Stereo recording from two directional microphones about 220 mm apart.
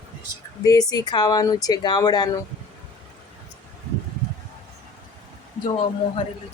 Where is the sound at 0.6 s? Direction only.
15° left (ahead or behind).